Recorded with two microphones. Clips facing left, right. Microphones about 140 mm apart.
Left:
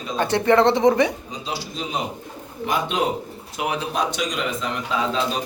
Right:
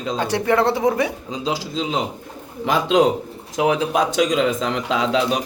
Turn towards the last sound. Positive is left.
turn(degrees=-70)  # may be behind; listen again after turning